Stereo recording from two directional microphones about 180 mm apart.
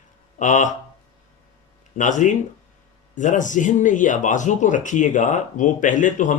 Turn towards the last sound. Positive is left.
turn(degrees=45)  # may be behind; listen again after turning